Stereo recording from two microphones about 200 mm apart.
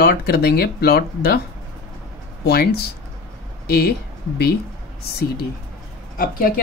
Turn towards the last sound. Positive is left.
turn(degrees=45)  # may be behind; listen again after turning